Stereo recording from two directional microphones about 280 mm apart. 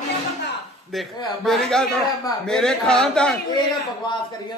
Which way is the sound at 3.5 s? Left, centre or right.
Centre.